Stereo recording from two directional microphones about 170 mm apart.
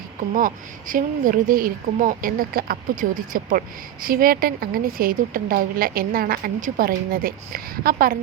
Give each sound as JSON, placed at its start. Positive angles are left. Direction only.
{"t": 0.3, "sound": "a woman's voice", "side_deg": -50}